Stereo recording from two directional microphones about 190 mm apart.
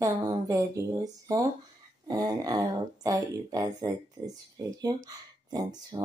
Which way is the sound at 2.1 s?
20° right (ahead or behind).